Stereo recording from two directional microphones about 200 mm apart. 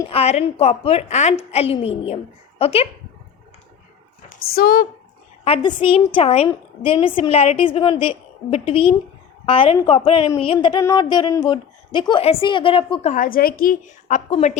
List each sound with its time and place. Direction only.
0.1 s a woman's voice: 30° left (ahead or behind)
4.3 s speech: 50° left (ahead or behind)
5.5 s a woman's voice: 25° left (ahead or behind)